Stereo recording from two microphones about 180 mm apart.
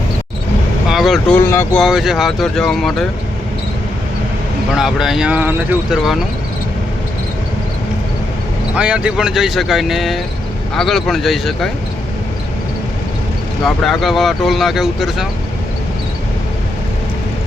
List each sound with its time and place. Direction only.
0.9 s speech: centre (ahead or behind)
1.4 s speech: 10° left (ahead or behind)
1.8 s speech: centre (ahead or behind)
4.8 s speech: centre (ahead or behind)
8.7 s speech: 5° right (ahead or behind)
13.7 s speech: centre (ahead or behind)